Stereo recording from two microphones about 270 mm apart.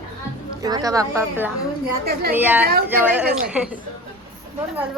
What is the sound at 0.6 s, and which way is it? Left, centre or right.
Speech, centre.